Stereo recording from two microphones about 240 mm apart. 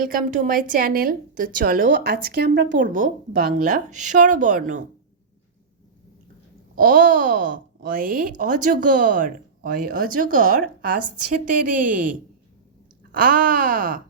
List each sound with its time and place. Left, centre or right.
0.0 s speech: right
6.7 s speech: right